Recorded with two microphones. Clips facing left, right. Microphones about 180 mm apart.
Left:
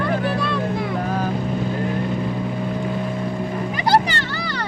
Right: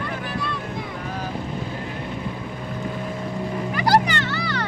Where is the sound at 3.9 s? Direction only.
35° left (ahead or behind).